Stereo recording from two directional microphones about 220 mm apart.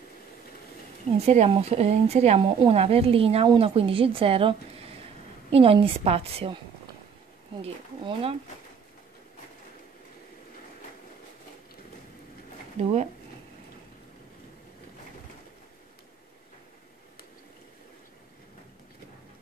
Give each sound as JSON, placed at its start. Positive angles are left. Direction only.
{"t": 1.2, "sound": "speech", "side_deg": -30}
{"t": 7.6, "sound": "speech", "side_deg": -25}
{"t": 12.8, "sound": "speech", "side_deg": -30}